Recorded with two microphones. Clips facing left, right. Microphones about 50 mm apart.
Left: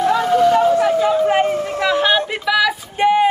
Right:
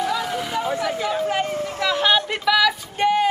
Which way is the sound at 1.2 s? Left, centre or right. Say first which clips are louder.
Left 7 dB; left.